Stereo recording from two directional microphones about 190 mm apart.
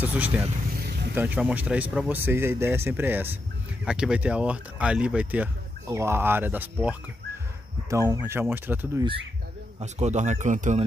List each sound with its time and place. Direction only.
0.0 s speech: 10° right (ahead or behind)
9.8 s speech: 35° right (ahead or behind)